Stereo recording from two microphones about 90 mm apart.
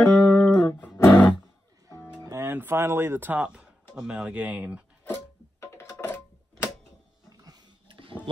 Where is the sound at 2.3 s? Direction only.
25° right (ahead or behind).